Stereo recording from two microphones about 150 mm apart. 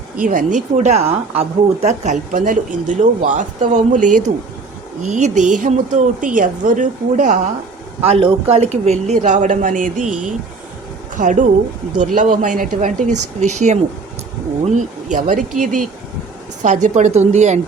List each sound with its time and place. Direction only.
0.2 s a woman's voice: 65° right (ahead or behind)
8.0 s speech: 40° right (ahead or behind); by 10.1 s 60° right (ahead or behind)
11.2 s a woman's voice: 55° right (ahead or behind)